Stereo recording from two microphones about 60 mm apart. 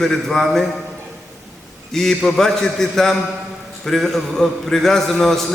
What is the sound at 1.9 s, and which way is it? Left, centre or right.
A man's voice, centre.